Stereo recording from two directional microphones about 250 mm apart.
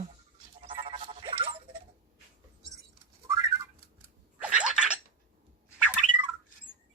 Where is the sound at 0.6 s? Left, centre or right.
Right.